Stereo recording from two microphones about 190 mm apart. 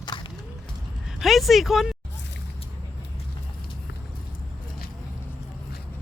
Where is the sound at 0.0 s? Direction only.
25° left (ahead or behind).